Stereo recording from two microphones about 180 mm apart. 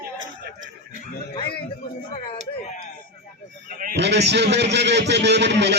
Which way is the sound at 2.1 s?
30° left (ahead or behind).